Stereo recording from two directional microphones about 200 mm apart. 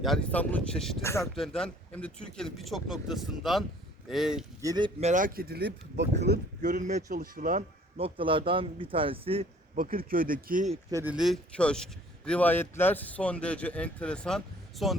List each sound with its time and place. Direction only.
0.0 s speech: 5° left (ahead or behind)
1.0 s speech: 15° left (ahead or behind)
4.6 s a man's voice: 20° right (ahead or behind)
4.9 s speech: 35° right (ahead or behind); by 6.4 s 55° right (ahead or behind)
6.6 s speech: 40° right (ahead or behind)
7.9 s a man's voice: 25° right (ahead or behind)
9.7 s speech: 45° right (ahead or behind)
10.9 s speech: 5° right (ahead or behind)